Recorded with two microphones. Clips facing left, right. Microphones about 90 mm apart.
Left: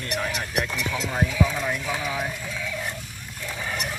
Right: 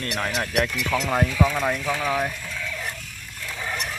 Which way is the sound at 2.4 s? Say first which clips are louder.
Left 1 dB; 10° left (ahead or behind).